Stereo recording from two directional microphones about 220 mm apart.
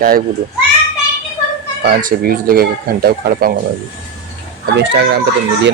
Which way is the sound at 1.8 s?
40° right (ahead or behind).